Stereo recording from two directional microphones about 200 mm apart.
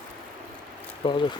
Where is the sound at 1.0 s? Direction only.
25° left (ahead or behind).